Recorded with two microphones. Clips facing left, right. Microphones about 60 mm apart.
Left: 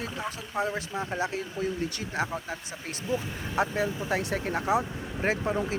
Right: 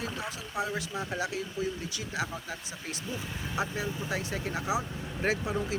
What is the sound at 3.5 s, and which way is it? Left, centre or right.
Speech, left.